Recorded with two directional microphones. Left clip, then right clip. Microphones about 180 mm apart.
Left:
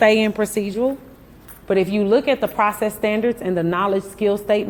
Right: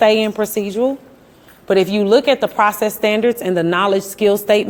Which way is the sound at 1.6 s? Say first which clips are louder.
Right 4 dB; 25° right (ahead or behind).